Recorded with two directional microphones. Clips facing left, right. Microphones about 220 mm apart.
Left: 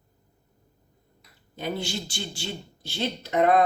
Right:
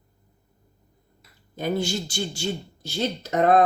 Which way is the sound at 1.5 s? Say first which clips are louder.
Right 5 dB; 45° right (ahead or behind).